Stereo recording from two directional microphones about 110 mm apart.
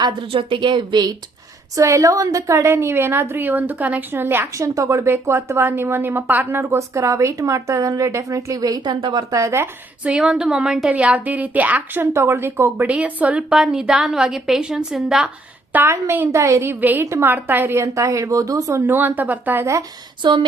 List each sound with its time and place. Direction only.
0.0 s speech: 50° right (ahead or behind)
1.7 s a woman's voice: 30° right (ahead or behind)
9.4 s a woman's voice: 25° right (ahead or behind)
10.0 s a woman's voice: 5° right (ahead or behind)
15.7 s a woman's voice: 20° right (ahead or behind)
18.9 s a woman's voice: 20° right (ahead or behind)
20.2 s speech: 45° right (ahead or behind)